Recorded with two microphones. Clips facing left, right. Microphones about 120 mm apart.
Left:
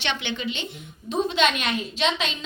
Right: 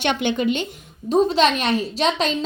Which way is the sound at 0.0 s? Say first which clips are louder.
Right 8 dB; 45° right (ahead or behind).